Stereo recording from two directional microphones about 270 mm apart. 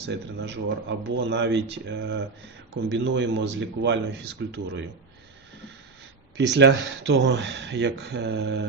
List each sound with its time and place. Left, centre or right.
0.0 s speech: right
6.3 s speech: right